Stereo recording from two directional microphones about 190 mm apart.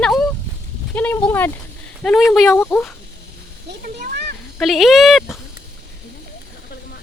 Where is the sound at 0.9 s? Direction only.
10° left (ahead or behind).